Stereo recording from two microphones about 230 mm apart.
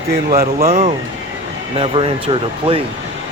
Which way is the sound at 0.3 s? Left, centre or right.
Right.